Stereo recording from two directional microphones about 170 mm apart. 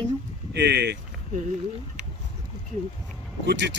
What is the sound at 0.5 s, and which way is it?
Speech, 75° right (ahead or behind).